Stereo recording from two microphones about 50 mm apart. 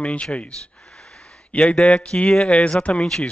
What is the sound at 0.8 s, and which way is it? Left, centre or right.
Wheeze, centre.